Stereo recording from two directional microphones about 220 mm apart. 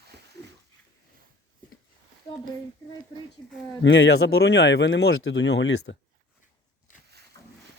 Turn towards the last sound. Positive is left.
turn(degrees=55)  # may be behind; listen again after turning